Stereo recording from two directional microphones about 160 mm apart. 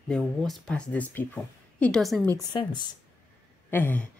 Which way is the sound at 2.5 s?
30° left (ahead or behind).